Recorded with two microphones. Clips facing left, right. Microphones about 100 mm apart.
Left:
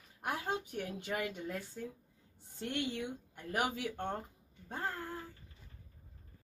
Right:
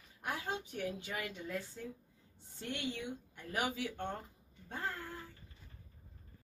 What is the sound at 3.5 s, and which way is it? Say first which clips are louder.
Speech: left 2 dB; 50° left (ahead or behind).